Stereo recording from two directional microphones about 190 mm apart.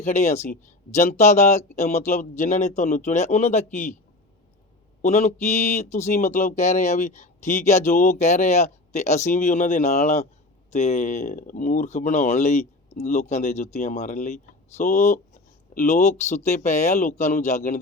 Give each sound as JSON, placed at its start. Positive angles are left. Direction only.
{"t": 0.0, "sound": "speech", "side_deg": 40}
{"t": 5.0, "sound": "speech", "side_deg": 35}